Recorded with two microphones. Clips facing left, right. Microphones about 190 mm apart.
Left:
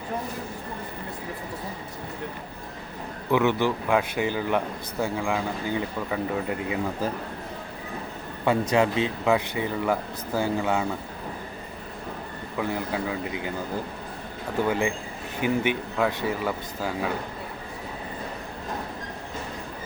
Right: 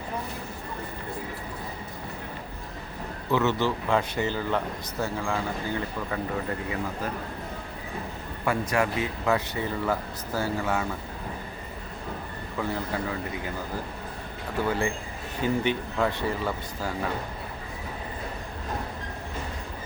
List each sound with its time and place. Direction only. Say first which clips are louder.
3.3 s speech: left 2 dB; 15° left (ahead or behind)
8.7 s speech: left 4 dB; 20° left (ahead or behind)
12.5 s speech: left 2 dB; 10° left (ahead or behind)
14.7 s speech: left 2 dB; 15° left (ahead or behind)